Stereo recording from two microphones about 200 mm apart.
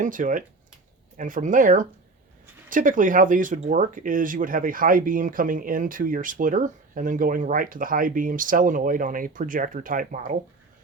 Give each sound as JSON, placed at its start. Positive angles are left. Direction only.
{"t": 0.0, "sound": "speech", "side_deg": -40}